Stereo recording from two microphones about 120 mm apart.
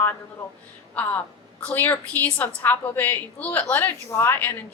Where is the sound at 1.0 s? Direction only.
15° left (ahead or behind).